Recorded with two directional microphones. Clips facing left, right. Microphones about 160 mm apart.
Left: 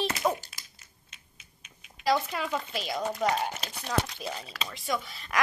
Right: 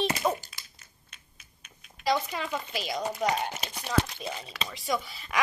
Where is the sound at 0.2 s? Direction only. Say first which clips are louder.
Even; centre (ahead or behind).